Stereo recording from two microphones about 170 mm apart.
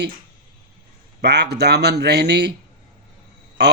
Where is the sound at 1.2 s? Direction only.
75° right (ahead or behind).